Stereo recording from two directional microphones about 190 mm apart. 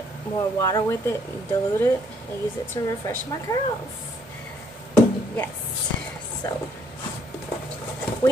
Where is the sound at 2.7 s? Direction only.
20° left (ahead or behind).